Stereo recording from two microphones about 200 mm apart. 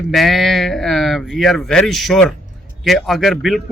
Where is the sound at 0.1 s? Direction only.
Centre (ahead or behind).